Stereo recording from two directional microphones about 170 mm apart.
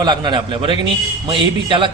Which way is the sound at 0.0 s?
25° right (ahead or behind).